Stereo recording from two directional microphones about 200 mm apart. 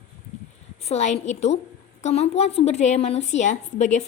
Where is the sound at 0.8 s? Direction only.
35° left (ahead or behind).